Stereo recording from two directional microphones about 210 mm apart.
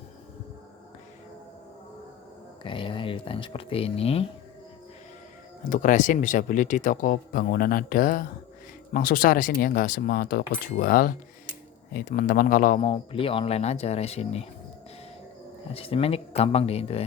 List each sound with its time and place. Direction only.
2.6 s speech: 25° left (ahead or behind)
5.6 s speech: 35° left (ahead or behind)
15.7 s speech: 25° left (ahead or behind)